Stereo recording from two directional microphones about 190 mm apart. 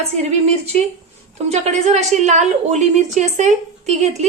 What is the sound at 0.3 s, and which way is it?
A woman's voice, 35° right (ahead or behind).